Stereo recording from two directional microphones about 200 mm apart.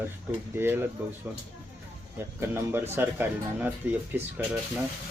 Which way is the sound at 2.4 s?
10° right (ahead or behind).